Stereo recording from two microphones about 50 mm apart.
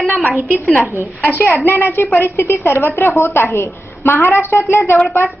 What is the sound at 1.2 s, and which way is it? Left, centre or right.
A woman's voice, left.